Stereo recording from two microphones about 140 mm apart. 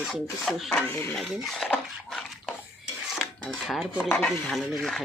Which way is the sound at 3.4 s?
Centre (ahead or behind).